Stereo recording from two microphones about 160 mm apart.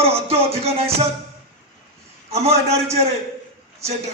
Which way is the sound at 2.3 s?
40° right (ahead or behind).